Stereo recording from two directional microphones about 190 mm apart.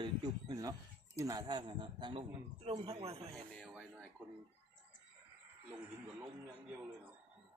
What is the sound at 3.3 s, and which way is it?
Speech, centre (ahead or behind).